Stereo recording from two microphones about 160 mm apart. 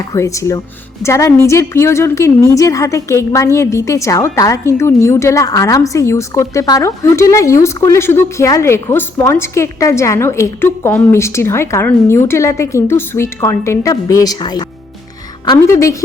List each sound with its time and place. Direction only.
0.1 s a woman's voice: 20° left (ahead or behind)